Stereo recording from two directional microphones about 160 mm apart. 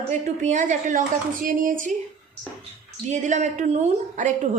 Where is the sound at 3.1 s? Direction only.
45° right (ahead or behind).